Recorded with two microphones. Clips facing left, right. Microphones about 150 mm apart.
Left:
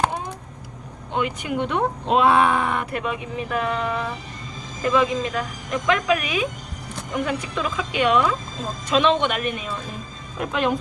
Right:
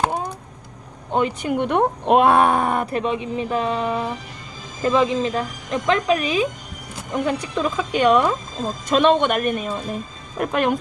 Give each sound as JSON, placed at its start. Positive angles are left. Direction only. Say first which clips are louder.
{"t": 1.1, "sound": "speech", "louder": "right 4 dB", "side_deg": -35}
{"t": 1.5, "sound": "speech", "louder": "right 3 dB", "side_deg": -55}
{"t": 2.9, "sound": "a woman's voice", "louder": "right 4 dB", "side_deg": -25}